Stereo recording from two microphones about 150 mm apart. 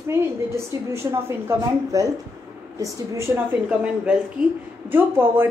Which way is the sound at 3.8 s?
5° right (ahead or behind).